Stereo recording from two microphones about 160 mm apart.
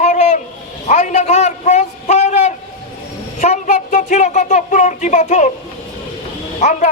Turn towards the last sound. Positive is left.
turn(degrees=55)  # may be behind; listen again after turning